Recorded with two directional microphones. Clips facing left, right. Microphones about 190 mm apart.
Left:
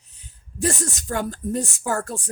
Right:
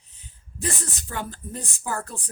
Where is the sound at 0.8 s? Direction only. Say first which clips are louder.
Left 7 dB; 45° left (ahead or behind).